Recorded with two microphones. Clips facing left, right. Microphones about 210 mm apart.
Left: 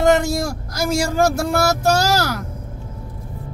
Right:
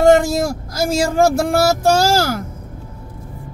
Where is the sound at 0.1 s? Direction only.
25° right (ahead or behind).